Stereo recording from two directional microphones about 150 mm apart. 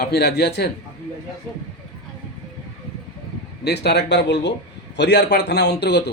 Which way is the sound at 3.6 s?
90° left.